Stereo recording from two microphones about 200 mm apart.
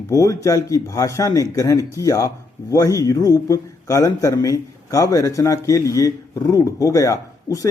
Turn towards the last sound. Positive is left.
turn(degrees=15)  # may be behind; listen again after turning